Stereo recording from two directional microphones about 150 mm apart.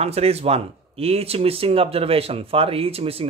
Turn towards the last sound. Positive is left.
turn(degrees=-40)  # may be behind; listen again after turning